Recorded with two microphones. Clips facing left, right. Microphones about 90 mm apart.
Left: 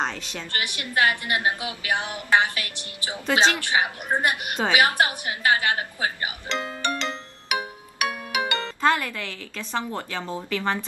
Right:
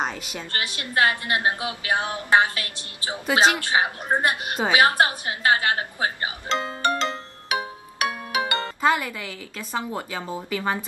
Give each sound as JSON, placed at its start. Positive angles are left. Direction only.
{"t": 0.0, "sound": "a woman's voice", "side_deg": -10}
{"t": 0.7, "sound": "a woman's voice", "side_deg": -25}
{"t": 2.0, "sound": "a sound", "side_deg": 20}
{"t": 2.2, "sound": "a woman's voice", "side_deg": -25}
{"t": 5.4, "sound": "music", "side_deg": -30}
{"t": 8.8, "sound": "speech", "side_deg": -10}